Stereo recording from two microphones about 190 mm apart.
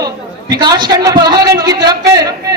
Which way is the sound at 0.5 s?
20° right (ahead or behind).